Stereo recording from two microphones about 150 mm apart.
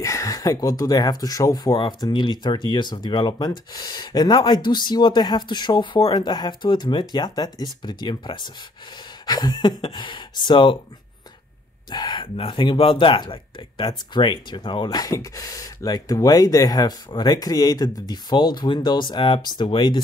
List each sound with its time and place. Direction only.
0.0 s speech: 20° left (ahead or behind)
11.9 s speech: 30° left (ahead or behind)